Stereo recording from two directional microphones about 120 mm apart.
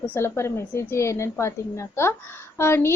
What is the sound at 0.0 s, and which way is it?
A woman's voice, 20° left (ahead or behind).